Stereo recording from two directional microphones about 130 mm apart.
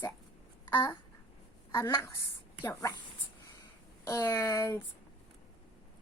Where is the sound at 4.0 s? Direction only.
25° left (ahead or behind).